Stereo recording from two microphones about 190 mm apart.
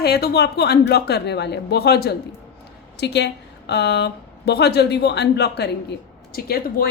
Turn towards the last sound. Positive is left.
turn(degrees=50)  # may be behind; listen again after turning